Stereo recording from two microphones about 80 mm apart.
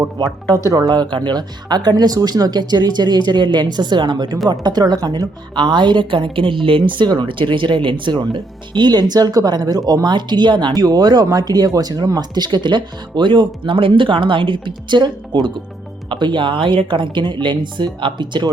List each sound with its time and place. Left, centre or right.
0.5 s a woman's voice: right
10.8 s a woman's voice: right
17.4 s a woman's voice: right